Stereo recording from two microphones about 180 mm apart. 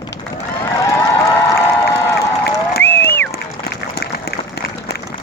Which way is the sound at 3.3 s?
60° left (ahead or behind).